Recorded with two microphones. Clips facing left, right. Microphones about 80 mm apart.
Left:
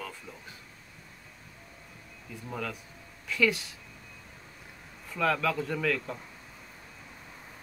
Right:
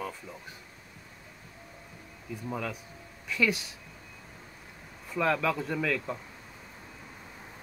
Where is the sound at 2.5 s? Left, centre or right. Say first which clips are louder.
Right 1 dB; centre.